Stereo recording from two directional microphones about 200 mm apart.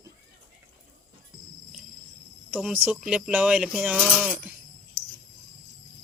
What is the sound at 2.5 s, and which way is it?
Speech, 5° right (ahead or behind).